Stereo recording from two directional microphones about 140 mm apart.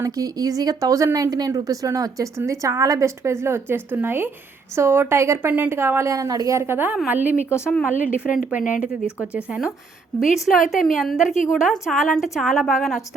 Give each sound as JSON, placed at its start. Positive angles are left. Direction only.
{"t": 0.0, "sound": "a woman's voice", "side_deg": -25}
{"t": 7.5, "sound": "speech", "side_deg": 15}
{"t": 8.5, "sound": "speech", "side_deg": 70}
{"t": 9.3, "sound": "a woman's voice", "side_deg": -10}